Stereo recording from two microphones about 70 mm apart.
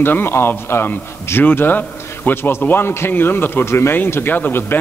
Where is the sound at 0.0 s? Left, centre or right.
Left.